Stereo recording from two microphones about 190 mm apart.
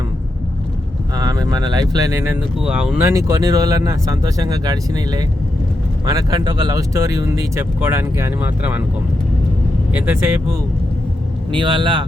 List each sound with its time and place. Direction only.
1.1 s speech: 20° right (ahead or behind)
2.6 s speech: 5° right (ahead or behind)
9.9 s speech: 10° right (ahead or behind)
11.5 s speech: 25° right (ahead or behind)